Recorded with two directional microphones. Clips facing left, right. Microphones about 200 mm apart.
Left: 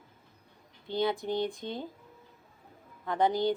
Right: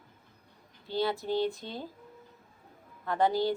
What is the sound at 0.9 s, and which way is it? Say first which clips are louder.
Speech: even; 20° left (ahead or behind).